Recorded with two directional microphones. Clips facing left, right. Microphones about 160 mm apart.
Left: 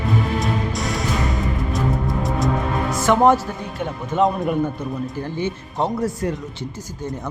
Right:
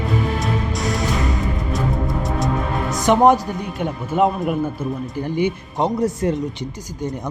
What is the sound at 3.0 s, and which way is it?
A man's voice, 20° right (ahead or behind).